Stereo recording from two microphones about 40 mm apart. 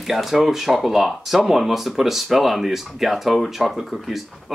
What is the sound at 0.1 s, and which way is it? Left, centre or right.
Speech, centre.